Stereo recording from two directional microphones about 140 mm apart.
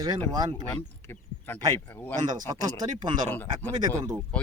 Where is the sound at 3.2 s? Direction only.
10° left (ahead or behind).